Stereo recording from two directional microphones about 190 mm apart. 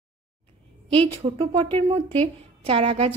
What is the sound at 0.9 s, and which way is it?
A woman's voice, 30° right (ahead or behind).